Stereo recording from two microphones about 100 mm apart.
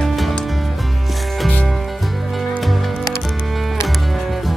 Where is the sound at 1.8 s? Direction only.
Centre (ahead or behind).